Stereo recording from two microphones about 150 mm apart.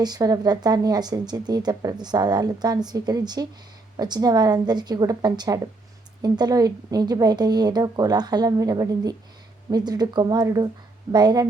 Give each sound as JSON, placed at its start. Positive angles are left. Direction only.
{"t": 0.0, "sound": "a woman's voice", "side_deg": -25}